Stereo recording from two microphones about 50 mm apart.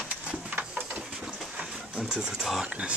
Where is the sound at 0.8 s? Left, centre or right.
Right.